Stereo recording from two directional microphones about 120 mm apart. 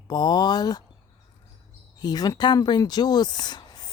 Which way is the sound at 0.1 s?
35° left (ahead or behind).